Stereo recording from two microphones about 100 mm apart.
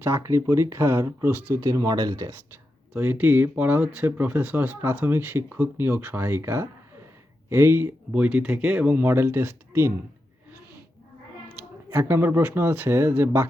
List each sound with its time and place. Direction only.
0.0 s speech: 25° right (ahead or behind)
1.5 s speech: 35° right (ahead or behind)
2.9 s speech: 20° right (ahead or behind)
8.1 s speech: 10° right (ahead or behind)
11.9 s speech: 25° right (ahead or behind)